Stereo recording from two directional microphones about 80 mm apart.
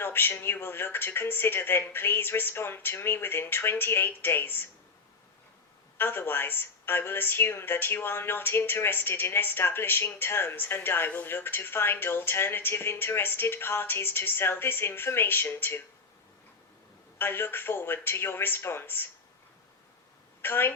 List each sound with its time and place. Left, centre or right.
0.0 s a woman's voice: left
6.0 s a woman's voice: left
17.2 s a woman's voice: left
20.4 s a woman's voice: left